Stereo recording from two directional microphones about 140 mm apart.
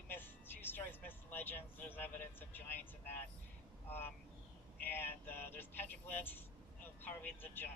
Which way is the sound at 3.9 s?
15° left (ahead or behind).